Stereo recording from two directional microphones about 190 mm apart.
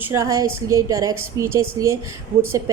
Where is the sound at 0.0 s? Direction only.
15° right (ahead or behind).